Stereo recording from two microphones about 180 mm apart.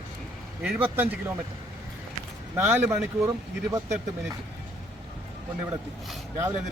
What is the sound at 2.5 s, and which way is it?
Speech, 15° right (ahead or behind).